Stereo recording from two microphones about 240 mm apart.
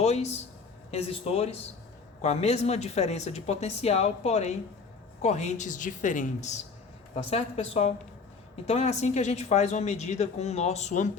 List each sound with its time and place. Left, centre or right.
0.0 s a woman's voice: left